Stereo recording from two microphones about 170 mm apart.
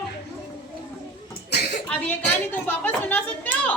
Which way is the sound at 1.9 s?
10° left (ahead or behind).